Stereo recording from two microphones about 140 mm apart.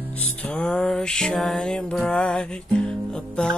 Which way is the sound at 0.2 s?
10° left (ahead or behind).